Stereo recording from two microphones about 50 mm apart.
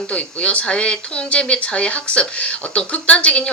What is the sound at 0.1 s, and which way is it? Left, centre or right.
Speech, left.